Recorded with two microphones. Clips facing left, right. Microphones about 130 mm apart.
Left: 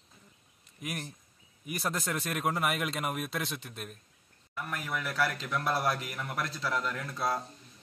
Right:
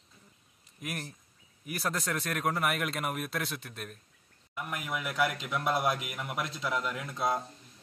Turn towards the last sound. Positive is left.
turn(degrees=-20)  # may be behind; listen again after turning